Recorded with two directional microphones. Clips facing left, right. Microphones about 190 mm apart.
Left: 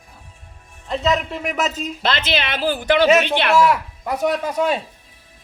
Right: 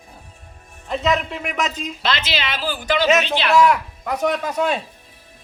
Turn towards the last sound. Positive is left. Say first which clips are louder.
# left 1 dB
turn(degrees=5)  # may be behind; listen again after turning